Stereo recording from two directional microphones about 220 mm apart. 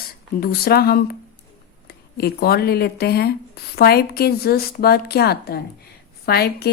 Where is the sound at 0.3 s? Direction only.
45° left (ahead or behind).